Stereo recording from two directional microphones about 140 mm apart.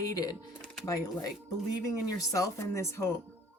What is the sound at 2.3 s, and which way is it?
Speech, 25° left (ahead or behind).